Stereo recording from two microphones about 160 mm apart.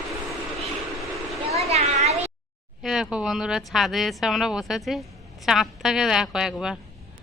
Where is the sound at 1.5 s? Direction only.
40° right (ahead or behind).